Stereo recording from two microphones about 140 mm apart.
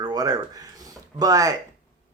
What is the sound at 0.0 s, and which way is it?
Speech, 30° right (ahead or behind).